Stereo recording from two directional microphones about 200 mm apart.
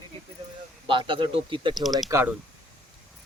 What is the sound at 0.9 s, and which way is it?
Speech, 25° right (ahead or behind).